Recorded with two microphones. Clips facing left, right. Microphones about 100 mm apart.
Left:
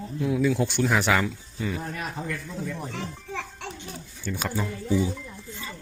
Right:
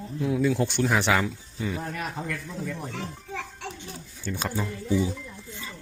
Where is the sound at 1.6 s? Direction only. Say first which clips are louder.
Even; centre (ahead or behind).